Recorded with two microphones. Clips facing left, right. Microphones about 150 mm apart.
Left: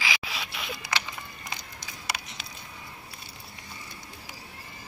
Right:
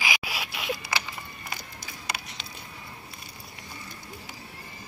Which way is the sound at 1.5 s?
20° left (ahead or behind).